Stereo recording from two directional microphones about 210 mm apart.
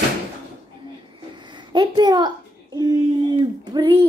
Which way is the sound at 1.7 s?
20° right (ahead or behind).